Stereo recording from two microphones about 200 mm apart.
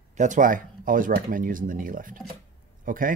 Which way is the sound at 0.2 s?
40° right (ahead or behind).